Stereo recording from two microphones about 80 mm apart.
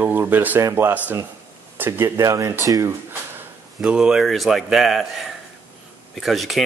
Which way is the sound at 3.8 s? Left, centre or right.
Centre.